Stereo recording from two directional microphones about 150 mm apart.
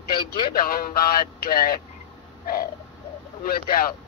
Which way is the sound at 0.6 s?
80° left.